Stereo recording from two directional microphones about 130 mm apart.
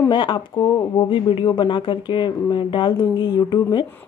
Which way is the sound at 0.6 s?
25° left (ahead or behind).